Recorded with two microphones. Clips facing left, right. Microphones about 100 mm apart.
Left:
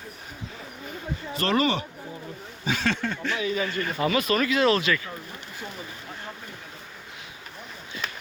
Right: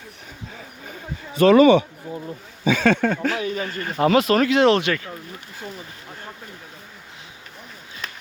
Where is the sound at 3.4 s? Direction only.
45° right (ahead or behind).